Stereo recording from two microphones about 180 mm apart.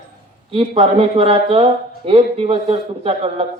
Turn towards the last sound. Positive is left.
turn(degrees=-35)  # may be behind; listen again after turning